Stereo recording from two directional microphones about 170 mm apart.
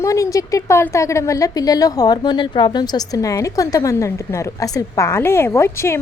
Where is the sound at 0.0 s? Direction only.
20° left (ahead or behind).